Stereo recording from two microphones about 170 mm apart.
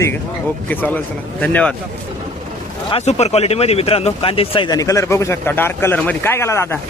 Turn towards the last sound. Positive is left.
turn(degrees=15)  # may be behind; listen again after turning